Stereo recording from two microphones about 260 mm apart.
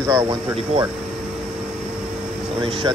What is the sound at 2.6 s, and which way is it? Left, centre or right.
Speech, centre.